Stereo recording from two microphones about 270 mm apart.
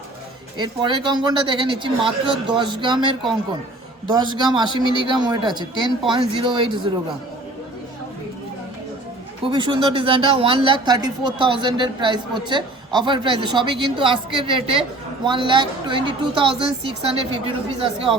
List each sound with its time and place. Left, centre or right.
0.6 s a man's voice: centre
9.4 s a man's voice: centre